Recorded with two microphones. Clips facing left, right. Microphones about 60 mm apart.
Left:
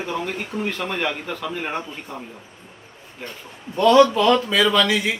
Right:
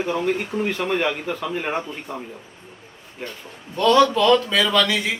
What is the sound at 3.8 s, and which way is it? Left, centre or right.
A man's voice, centre.